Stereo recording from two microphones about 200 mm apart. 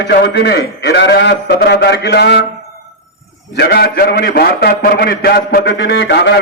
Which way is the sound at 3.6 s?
55° left (ahead or behind).